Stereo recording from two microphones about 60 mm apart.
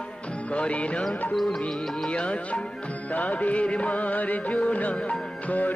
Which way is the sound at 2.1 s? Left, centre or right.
Centre.